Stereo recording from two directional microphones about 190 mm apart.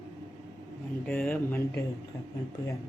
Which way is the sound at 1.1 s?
10° left (ahead or behind).